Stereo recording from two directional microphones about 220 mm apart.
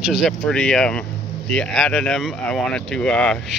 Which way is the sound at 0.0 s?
5° right (ahead or behind).